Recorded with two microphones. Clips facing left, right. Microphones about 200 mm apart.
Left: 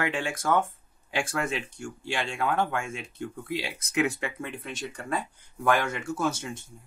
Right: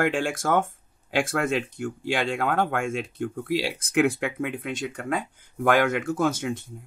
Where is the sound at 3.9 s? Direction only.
50° right (ahead or behind).